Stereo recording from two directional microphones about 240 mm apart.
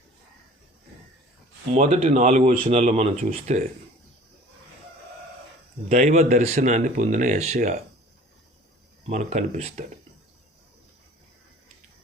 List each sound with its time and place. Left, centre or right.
1.7 s speech: right
5.9 s speech: right
9.0 s speech: right